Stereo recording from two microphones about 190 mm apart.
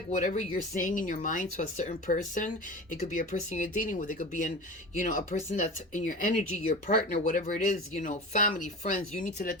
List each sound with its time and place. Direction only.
0.1 s speech: 40° left (ahead or behind)